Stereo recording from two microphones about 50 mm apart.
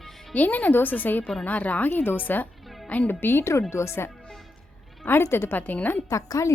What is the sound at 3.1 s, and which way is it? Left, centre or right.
Speech, left.